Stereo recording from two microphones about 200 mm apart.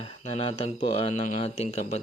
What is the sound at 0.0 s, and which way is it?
Speech, 30° left (ahead or behind).